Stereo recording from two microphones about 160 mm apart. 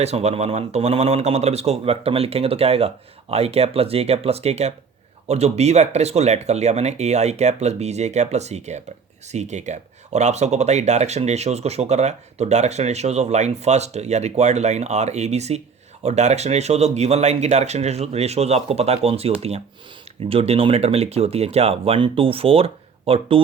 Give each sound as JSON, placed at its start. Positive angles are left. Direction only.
{"t": 0.0, "sound": "speech", "side_deg": -40}